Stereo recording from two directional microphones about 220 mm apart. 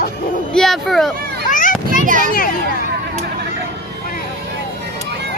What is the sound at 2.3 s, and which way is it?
Speech, 40° left (ahead or behind).